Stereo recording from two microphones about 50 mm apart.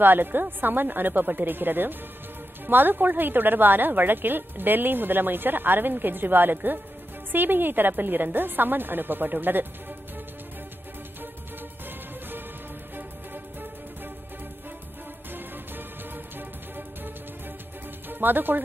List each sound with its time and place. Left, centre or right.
0.0 s a woman's voice: right
12.9 s music: right
15.3 s music: right
18.0 s speech: right